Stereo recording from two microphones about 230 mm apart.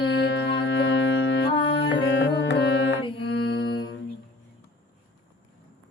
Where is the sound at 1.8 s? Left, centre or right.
Left.